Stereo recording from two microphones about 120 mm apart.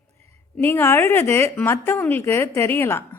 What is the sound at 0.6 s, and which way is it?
Speech, 20° left (ahead or behind).